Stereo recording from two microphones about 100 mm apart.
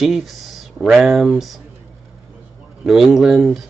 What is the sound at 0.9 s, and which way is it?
Speech, 5° right (ahead or behind).